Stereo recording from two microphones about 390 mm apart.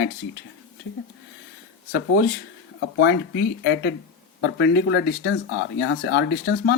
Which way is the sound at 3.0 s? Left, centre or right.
Left.